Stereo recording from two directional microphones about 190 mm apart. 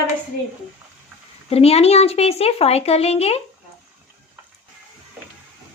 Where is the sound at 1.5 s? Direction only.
30° left (ahead or behind).